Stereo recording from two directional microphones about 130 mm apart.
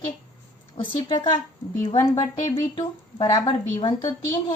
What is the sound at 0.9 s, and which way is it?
A woman's voice, 40° left (ahead or behind).